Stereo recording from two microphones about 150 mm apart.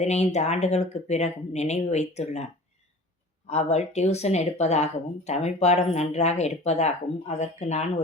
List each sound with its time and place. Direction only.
0.0 s speech: 50° left (ahead or behind)